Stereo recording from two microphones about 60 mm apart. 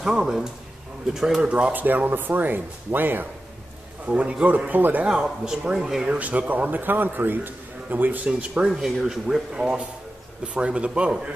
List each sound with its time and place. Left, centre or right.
0.0 s speech: centre
1.5 s speech: right
4.0 s a man's voice: right
5.1 s speech: centre
6.0 s a man's voice: right
8.6 s a man's voice: centre